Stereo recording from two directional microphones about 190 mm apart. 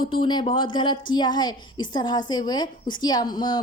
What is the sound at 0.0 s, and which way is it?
A woman's voice, 25° left (ahead or behind).